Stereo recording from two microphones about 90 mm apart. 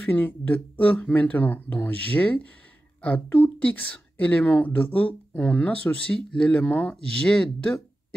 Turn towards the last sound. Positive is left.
turn(degrees=10)  # may be behind; listen again after turning